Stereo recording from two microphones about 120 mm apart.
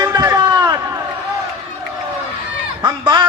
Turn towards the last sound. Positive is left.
turn(degrees=-40)  # may be behind; listen again after turning